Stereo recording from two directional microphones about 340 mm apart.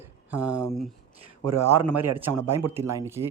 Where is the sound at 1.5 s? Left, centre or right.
Right.